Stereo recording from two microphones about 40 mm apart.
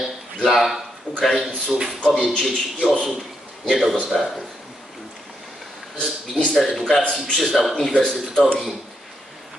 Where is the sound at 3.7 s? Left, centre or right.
Centre.